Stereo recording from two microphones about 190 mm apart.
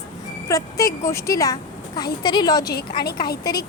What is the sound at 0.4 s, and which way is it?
A woman's voice, 15° left (ahead or behind).